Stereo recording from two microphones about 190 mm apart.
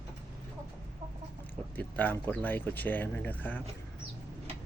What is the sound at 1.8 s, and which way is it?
Speech, 10° left (ahead or behind).